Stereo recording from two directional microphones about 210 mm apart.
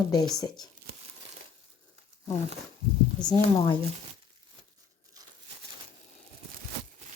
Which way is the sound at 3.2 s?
20° left (ahead or behind).